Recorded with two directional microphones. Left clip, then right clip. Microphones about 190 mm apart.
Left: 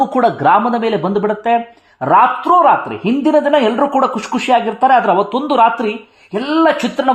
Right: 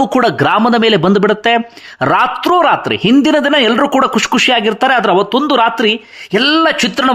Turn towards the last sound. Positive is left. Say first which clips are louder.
# right 1 dB
turn(degrees=-25)  # may be behind; listen again after turning